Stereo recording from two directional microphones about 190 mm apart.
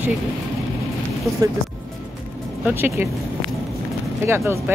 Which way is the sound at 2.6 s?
10° right (ahead or behind).